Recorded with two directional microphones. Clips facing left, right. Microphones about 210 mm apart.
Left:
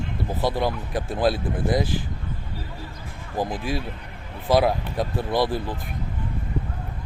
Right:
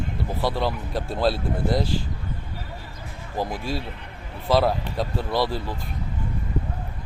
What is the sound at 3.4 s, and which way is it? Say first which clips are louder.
Speech: left 1 dB; 15° left (ahead or behind).